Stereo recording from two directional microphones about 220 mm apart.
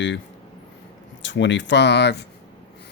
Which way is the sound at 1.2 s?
55° left (ahead or behind).